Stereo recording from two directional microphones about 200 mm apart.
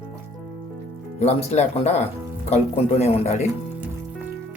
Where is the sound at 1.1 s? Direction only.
30° left (ahead or behind).